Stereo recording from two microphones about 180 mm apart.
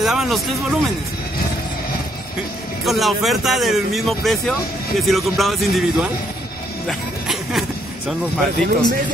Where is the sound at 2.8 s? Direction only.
Centre (ahead or behind).